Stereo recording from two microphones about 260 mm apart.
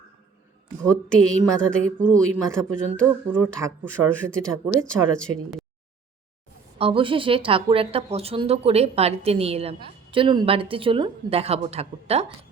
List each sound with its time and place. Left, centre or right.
0.9 s speech: centre
3.8 s speech: centre
6.7 s speech: right